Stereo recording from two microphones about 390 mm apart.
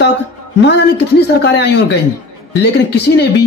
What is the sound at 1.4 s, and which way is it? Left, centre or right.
Speech, left.